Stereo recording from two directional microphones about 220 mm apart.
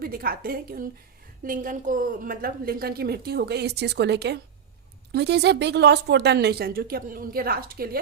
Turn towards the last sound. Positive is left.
turn(degrees=-45)  # may be behind; listen again after turning